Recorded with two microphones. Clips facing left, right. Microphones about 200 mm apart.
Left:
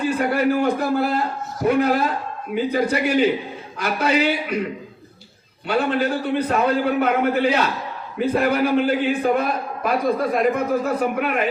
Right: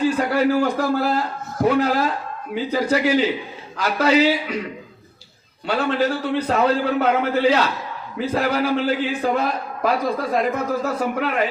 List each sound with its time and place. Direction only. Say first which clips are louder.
0.0 s a man's voice: right 1 dB; 55° left (ahead or behind)
5.6 s a man's voice: even; 55° left (ahead or behind)